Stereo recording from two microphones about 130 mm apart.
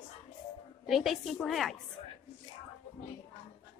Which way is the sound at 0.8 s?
Centre (ahead or behind).